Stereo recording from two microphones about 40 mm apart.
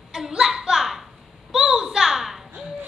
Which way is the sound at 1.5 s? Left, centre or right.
Centre.